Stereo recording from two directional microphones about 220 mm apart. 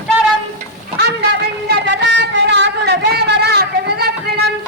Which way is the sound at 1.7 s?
50° right (ahead or behind).